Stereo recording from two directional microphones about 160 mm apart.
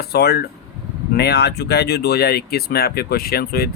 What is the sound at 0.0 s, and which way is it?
Speech, 85° left.